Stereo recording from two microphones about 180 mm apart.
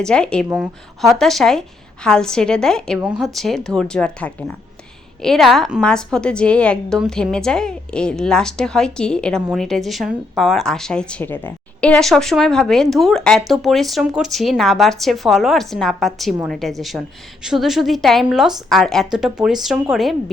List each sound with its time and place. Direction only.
0.0 s speech: 5° left (ahead or behind)